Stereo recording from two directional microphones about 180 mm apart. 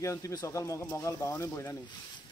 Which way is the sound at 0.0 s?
15° left (ahead or behind).